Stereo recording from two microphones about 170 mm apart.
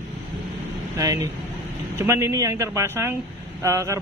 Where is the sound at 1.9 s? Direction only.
15° right (ahead or behind).